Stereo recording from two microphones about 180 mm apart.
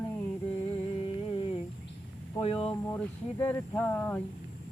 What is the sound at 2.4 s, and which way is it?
Speech, 30° left (ahead or behind).